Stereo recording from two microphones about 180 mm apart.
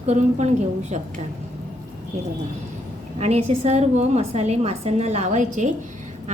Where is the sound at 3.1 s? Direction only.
35° right (ahead or behind).